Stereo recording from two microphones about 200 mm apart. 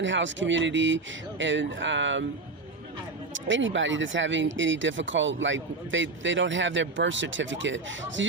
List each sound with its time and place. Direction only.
0.0 s speech: 65° right (ahead or behind)
3.3 s speech: 70° right (ahead or behind)